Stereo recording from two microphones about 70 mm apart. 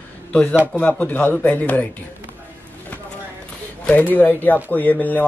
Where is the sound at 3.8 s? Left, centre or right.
Left.